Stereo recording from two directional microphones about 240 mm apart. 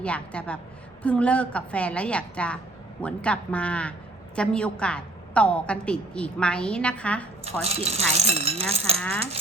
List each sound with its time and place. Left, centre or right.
0.0 s a woman's voice: centre
7.6 s speech: right
9.0 s a woman's voice: centre